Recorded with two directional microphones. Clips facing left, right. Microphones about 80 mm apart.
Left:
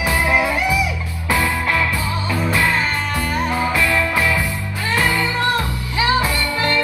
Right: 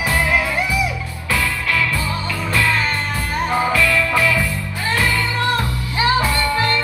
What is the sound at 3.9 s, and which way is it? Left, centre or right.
Music, left.